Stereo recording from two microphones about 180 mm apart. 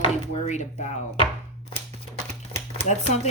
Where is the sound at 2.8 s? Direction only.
40° left (ahead or behind).